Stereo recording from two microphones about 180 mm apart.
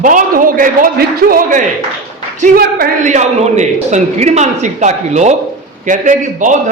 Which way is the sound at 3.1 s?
40° right (ahead or behind).